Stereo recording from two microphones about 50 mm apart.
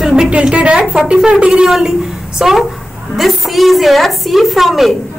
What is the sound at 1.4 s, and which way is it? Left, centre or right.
Speech, right.